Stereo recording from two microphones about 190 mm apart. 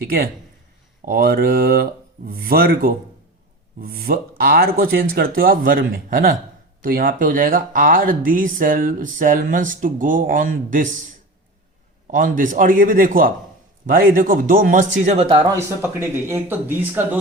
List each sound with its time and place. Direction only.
1.0 s speech: 50° right (ahead or behind)
12.4 s speech: 45° right (ahead or behind)
15.4 s speech: 15° right (ahead or behind)